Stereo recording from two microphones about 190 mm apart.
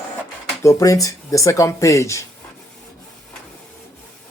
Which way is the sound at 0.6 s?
15° left (ahead or behind).